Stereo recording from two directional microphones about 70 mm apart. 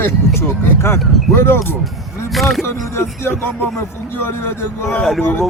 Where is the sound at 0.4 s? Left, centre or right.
Left.